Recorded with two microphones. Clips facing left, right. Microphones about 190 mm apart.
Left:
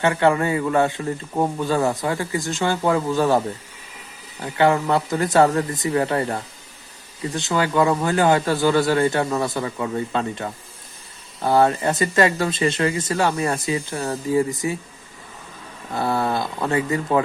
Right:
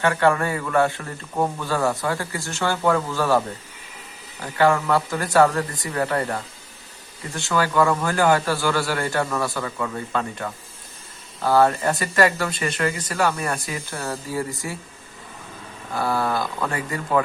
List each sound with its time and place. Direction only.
0.0 s speech: 20° left (ahead or behind)
4.5 s speech: 20° left (ahead or behind)
16.0 s speech: 25° left (ahead or behind)